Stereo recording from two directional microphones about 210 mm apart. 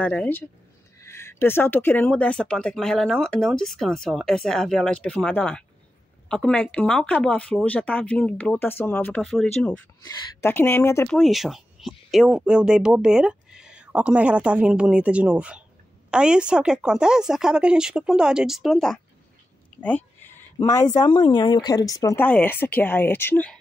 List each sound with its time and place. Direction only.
0.0 s speech: 5° left (ahead or behind)
11.1 s speech: centre (ahead or behind)